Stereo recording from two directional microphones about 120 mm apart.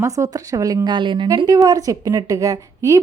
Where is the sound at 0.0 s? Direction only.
25° right (ahead or behind).